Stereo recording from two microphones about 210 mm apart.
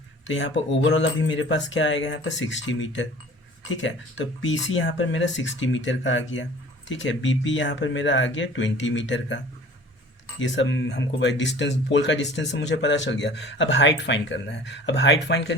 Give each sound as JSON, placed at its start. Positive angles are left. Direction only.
{"t": 0.3, "sound": "speech", "side_deg": 60}
{"t": 10.4, "sound": "speech", "side_deg": 60}